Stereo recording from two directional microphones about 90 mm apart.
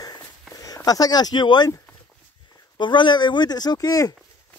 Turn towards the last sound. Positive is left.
turn(degrees=40)  # may be behind; listen again after turning